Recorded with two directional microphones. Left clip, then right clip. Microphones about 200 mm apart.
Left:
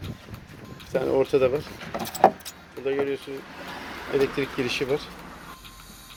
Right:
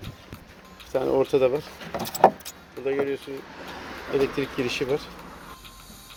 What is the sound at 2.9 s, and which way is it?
Speech, centre (ahead or behind).